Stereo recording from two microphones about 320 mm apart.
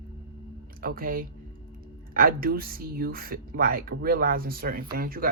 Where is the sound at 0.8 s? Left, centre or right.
Right.